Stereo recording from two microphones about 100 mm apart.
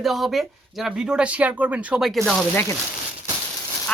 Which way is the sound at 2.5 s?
25° left (ahead or behind).